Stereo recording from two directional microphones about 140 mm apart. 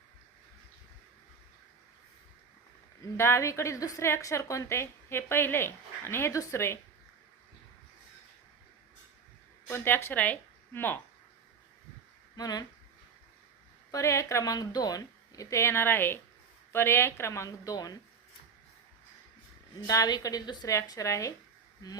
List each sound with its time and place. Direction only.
3.0 s a woman's voice: 20° left (ahead or behind)
9.6 s a woman's voice: 15° left (ahead or behind)
12.4 s a woman's voice: 25° left (ahead or behind)
13.9 s a woman's voice: 20° left (ahead or behind)
19.9 s a woman's voice: 25° left (ahead or behind)